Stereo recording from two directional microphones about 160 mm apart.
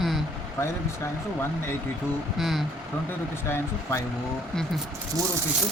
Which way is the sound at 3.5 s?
15° left (ahead or behind).